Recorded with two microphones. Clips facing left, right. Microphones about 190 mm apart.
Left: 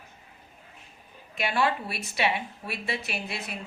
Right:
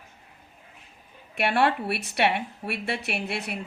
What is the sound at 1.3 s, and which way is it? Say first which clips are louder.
A woman's voice: right 3 dB; 65° right (ahead or behind).